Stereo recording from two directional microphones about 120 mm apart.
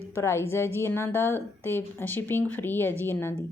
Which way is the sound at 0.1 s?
20° left (ahead or behind).